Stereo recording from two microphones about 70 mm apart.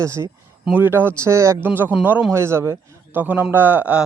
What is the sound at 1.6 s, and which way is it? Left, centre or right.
Speech, right.